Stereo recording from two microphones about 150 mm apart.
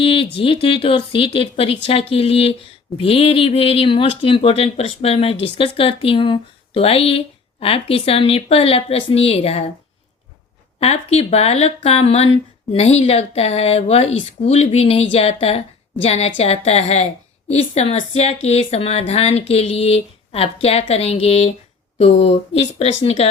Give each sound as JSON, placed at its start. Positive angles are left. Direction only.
{"t": 0.0, "sound": "speech", "side_deg": 35}
{"t": 10.8, "sound": "speech", "side_deg": 45}